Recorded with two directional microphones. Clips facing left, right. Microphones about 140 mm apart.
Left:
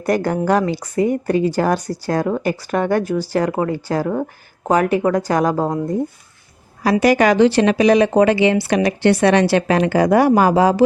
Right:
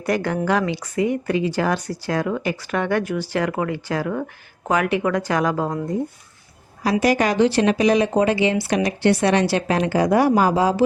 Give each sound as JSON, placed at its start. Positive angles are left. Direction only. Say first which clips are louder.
{"t": 0.0, "sound": "speech", "louder": "left 4 dB", "side_deg": 40}
{"t": 7.0, "sound": "speech", "louder": "left 5 dB", "side_deg": 75}